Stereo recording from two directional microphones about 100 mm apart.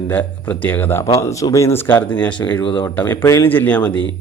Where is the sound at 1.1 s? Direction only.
30° left (ahead or behind); by 2.3 s 15° left (ahead or behind).